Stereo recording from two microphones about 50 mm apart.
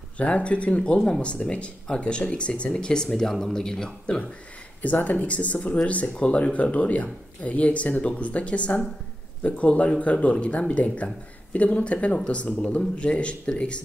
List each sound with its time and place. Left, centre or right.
0.2 s speech: left; by 4.2 s centre
4.8 s speech: left